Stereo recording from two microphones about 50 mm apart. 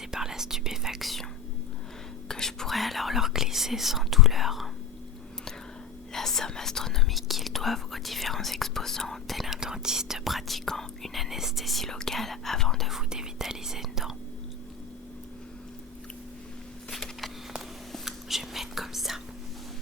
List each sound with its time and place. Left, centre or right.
0.1 s whispering: centre
2.2 s whispering: centre
6.1 s speech: centre
9.6 s speech: centre
10.2 s speech: centre
12.9 s speech: centre
16.9 s a sound: centre
18.0 s whispering: centre